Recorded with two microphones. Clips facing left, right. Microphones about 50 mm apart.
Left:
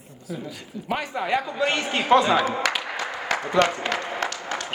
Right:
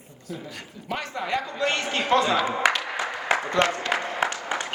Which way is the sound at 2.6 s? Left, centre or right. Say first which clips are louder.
Right 3 dB; right.